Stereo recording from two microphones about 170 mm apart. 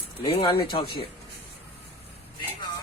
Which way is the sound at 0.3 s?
30° left (ahead or behind).